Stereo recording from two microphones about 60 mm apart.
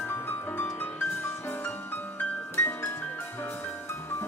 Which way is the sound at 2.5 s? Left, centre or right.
Left.